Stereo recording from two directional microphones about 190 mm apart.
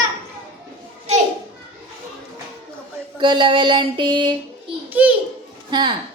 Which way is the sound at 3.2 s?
25° right (ahead or behind).